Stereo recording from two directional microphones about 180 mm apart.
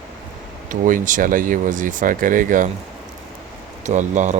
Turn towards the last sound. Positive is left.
turn(degrees=-40)  # may be behind; listen again after turning